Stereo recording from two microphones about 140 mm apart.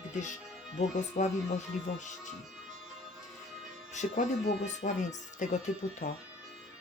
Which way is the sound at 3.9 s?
55° left (ahead or behind).